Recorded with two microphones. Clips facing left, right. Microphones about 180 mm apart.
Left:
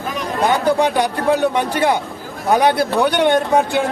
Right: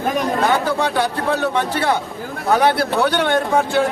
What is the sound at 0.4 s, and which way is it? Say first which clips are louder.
Speech: left 7 dB; 15° left (ahead or behind).